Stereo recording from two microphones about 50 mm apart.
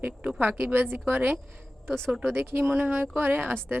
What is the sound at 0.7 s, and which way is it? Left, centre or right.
Speech, right.